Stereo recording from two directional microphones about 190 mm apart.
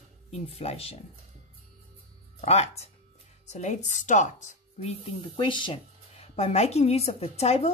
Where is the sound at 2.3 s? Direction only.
35° left (ahead or behind).